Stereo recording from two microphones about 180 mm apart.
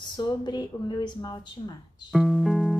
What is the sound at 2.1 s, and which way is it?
Music, centre (ahead or behind).